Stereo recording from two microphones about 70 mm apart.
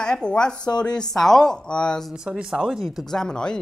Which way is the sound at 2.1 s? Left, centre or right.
Centre.